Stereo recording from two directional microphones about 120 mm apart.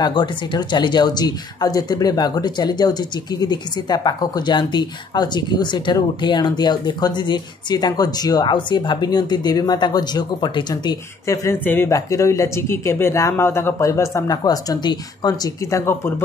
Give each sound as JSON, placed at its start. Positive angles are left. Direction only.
{"t": 0.0, "sound": "speech", "side_deg": 40}
{"t": 11.6, "sound": "speech", "side_deg": 15}
{"t": 11.9, "sound": "speech", "side_deg": 25}